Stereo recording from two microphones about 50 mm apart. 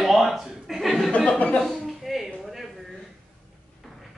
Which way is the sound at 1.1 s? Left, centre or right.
Left.